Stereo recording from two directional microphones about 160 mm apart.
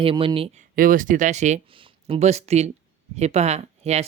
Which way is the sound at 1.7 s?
35° right (ahead or behind).